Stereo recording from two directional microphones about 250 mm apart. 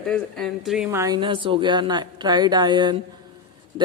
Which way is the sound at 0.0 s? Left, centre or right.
Centre.